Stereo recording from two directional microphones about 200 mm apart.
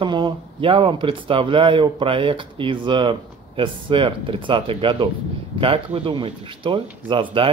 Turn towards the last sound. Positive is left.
turn(degrees=-25)  # may be behind; listen again after turning